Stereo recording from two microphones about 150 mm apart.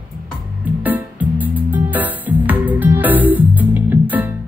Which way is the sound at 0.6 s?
10° right (ahead or behind).